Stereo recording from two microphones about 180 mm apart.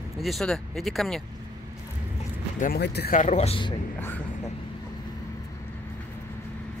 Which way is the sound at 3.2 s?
35° left (ahead or behind).